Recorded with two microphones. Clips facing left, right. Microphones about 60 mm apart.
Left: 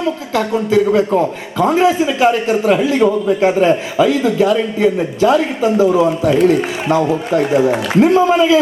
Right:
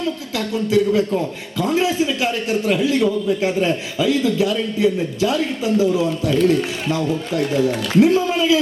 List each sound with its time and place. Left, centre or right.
0.0 s a man's voice: left